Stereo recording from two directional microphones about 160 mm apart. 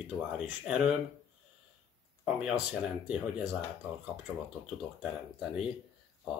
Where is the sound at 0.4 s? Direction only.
5° right (ahead or behind).